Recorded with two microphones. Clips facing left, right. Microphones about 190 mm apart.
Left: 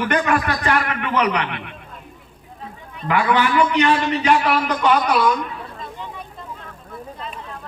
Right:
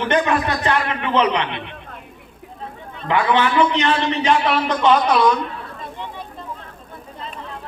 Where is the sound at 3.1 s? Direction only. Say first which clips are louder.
Even; 25° right (ahead or behind).